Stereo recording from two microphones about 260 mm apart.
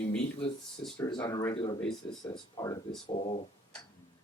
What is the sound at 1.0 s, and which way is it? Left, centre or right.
Speech, centre.